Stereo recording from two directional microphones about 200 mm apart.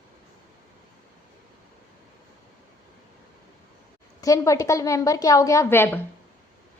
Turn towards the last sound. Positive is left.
turn(degrees=10)  # may be behind; listen again after turning